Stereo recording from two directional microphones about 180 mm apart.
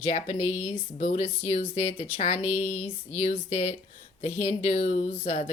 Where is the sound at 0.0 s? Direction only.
35° left (ahead or behind).